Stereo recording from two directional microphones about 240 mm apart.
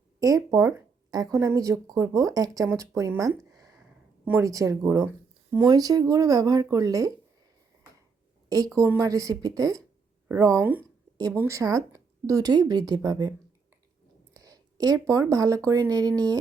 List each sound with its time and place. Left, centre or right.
0.2 s speech: centre
3.5 s a sound: centre
4.3 s speech: centre
8.4 s speech: centre
14.3 s speech: centre